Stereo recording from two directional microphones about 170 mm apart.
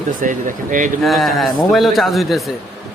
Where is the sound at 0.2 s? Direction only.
50° right (ahead or behind).